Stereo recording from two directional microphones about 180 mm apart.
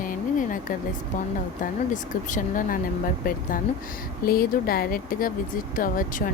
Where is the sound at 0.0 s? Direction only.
50° left (ahead or behind).